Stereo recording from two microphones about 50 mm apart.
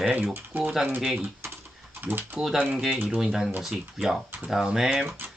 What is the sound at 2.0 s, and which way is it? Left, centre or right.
Speech, right.